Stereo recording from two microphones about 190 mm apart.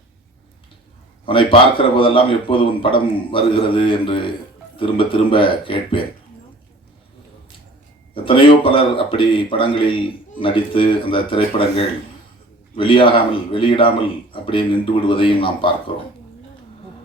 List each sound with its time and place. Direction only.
1.2 s a man's voice: 25° left (ahead or behind)
8.1 s a man's voice: 30° left (ahead or behind)
15.0 s a man's voice: 30° left (ahead or behind)